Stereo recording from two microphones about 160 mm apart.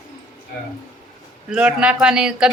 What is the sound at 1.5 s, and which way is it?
Speech, 5° right (ahead or behind).